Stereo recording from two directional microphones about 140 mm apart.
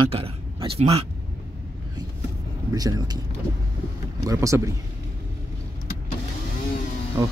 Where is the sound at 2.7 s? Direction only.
25° right (ahead or behind).